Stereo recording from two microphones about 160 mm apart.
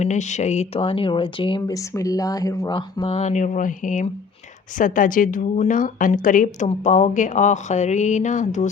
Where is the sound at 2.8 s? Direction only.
35° left (ahead or behind).